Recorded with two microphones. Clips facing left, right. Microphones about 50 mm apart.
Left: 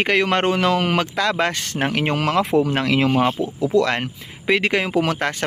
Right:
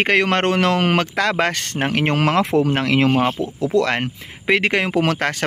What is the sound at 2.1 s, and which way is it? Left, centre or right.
Speech, right.